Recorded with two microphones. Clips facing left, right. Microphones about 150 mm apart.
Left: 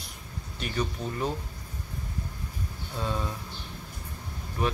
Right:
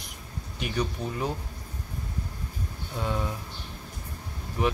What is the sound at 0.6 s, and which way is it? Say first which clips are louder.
Speech: right 1 dB; 10° right (ahead or behind).